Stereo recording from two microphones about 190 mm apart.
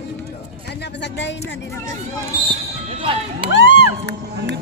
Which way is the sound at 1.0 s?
65° left (ahead or behind).